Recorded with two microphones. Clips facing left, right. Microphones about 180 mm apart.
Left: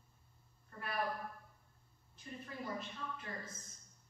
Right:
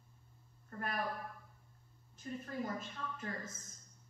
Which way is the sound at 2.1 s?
45° right (ahead or behind).